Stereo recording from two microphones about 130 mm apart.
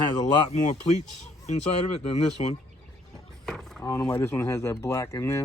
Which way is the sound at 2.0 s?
55° left (ahead or behind).